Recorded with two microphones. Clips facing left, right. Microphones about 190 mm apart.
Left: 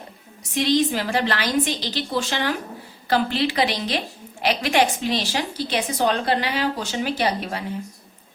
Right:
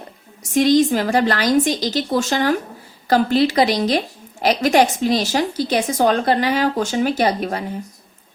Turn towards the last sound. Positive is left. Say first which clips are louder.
# right 5 dB
turn(degrees=-45)  # may be behind; listen again after turning